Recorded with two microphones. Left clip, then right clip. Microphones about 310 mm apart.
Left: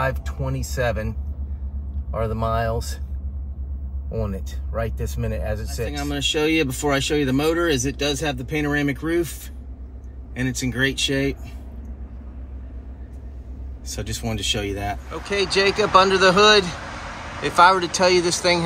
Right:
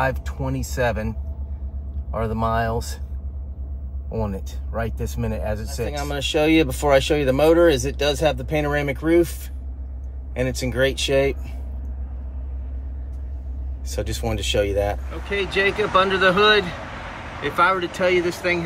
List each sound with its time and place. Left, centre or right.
0.0 s speech: centre
2.1 s speech: centre
4.1 s speech: centre
5.9 s speech: centre
13.9 s speech: centre
15.2 s speech: centre